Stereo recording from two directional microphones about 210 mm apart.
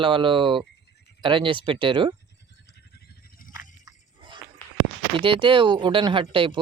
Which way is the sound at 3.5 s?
15° right (ahead or behind).